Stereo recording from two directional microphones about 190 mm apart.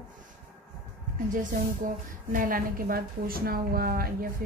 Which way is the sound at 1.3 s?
45° right (ahead or behind).